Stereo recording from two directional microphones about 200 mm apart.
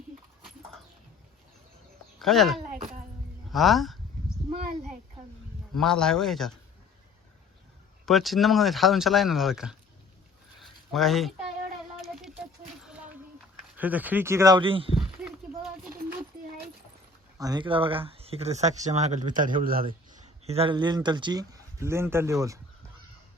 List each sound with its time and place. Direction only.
2.1 s speech: centre (ahead or behind)
4.4 s a sound: 30° right (ahead or behind)
5.7 s speech: 5° left (ahead or behind)
8.0 s speech: centre (ahead or behind)
10.6 s a sound: centre (ahead or behind)
13.7 s speech: 10° right (ahead or behind); by 14.9 s 25° right (ahead or behind)
15.2 s a sound: centre (ahead or behind)
17.3 s speech: 20° right (ahead or behind); by 19.9 s 45° right (ahead or behind)
19.9 s speech: 30° right (ahead or behind); by 22.6 s 15° right (ahead or behind)